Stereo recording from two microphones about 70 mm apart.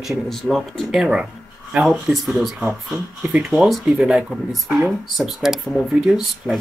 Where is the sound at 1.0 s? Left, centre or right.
Centre.